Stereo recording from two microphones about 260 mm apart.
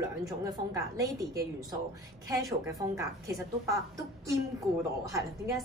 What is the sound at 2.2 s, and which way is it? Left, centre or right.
A woman's voice, centre.